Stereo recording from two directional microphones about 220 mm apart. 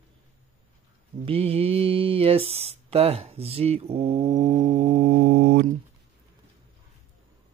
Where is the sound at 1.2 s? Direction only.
25° right (ahead or behind); by 5.7 s 45° right (ahead or behind).